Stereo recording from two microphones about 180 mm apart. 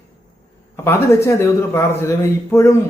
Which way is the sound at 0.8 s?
15° left (ahead or behind).